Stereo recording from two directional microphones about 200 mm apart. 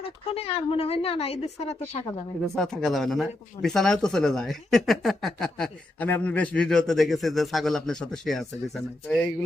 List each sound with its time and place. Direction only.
0.0 s speech: 30° left (ahead or behind)
2.6 s speech: centre (ahead or behind)